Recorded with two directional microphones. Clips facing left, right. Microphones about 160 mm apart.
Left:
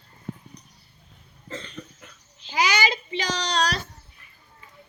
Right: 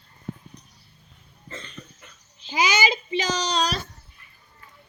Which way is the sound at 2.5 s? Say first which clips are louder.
Right 1 dB; 20° right (ahead or behind).